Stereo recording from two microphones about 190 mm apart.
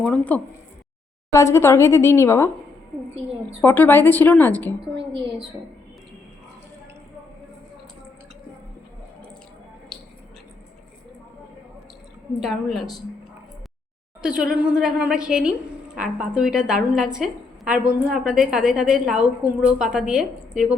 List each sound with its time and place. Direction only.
0.0 s a woman's voice: 5° left (ahead or behind)
3.6 s a woman's voice: 10° left (ahead or behind)
12.4 s a woman's voice: centre (ahead or behind)
14.2 s a woman's voice: 5° right (ahead or behind)